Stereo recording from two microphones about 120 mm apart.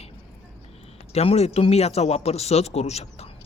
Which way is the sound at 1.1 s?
60° left (ahead or behind).